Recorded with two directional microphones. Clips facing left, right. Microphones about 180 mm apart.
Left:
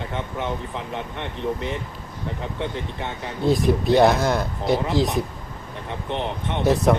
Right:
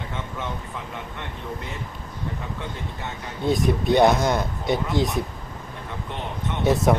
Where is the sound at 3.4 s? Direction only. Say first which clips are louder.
Left 2 dB; centre (ahead or behind).